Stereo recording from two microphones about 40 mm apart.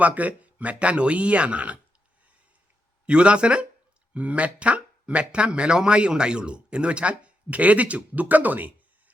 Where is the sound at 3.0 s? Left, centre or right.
Right.